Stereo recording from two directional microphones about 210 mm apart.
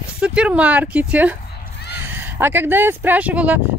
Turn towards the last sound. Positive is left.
turn(degrees=-5)  # may be behind; listen again after turning